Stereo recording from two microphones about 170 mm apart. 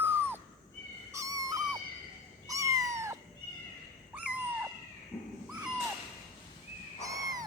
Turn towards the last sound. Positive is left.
turn(degrees=-20)  # may be behind; listen again after turning